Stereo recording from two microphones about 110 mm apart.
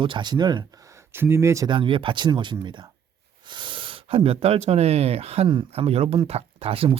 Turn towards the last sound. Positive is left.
turn(degrees=-60)  # may be behind; listen again after turning